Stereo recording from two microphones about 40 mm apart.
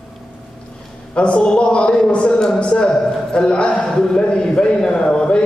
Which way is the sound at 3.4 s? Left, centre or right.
Left.